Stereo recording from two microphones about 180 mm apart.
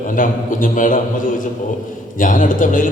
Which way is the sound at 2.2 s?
45° left (ahead or behind).